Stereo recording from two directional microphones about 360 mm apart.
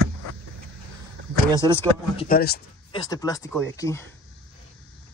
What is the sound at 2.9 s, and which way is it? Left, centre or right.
Speech, centre.